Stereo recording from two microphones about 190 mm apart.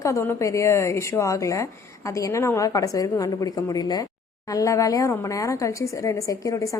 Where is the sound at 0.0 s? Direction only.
15° left (ahead or behind).